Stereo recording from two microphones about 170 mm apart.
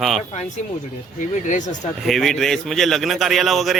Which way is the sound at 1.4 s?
45° left (ahead or behind).